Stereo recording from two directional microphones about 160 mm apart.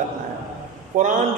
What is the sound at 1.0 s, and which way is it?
Speech, 50° right (ahead or behind).